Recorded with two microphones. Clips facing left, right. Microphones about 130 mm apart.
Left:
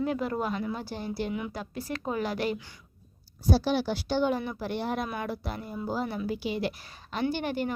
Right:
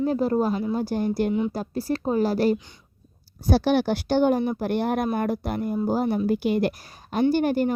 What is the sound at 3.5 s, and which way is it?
A woman's voice, 65° right (ahead or behind).